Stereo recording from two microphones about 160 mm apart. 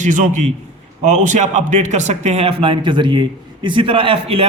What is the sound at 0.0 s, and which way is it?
A man's voice, 50° right (ahead or behind).